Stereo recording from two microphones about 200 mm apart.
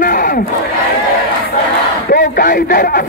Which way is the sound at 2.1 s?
40° left (ahead or behind).